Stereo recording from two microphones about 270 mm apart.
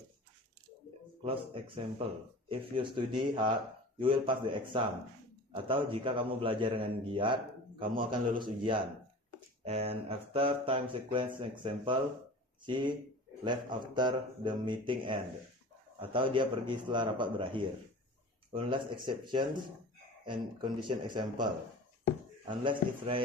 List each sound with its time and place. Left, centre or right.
1.2 s speech: centre
22.4 s speech: centre